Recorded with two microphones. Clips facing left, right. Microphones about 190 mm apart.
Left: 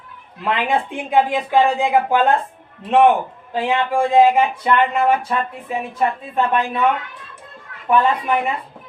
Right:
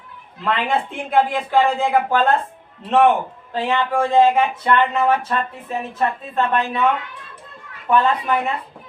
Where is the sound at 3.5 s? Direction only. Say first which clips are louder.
Left 1 dB; 10° left (ahead or behind).